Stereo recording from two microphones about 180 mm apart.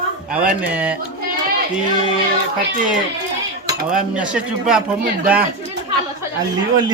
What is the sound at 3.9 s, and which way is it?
Speech, 5° right (ahead or behind).